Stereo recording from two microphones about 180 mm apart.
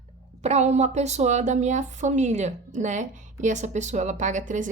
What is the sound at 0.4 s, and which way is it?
A woman's voice, 40° right (ahead or behind).